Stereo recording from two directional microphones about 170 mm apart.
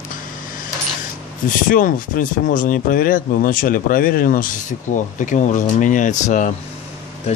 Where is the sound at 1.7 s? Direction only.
50° left (ahead or behind).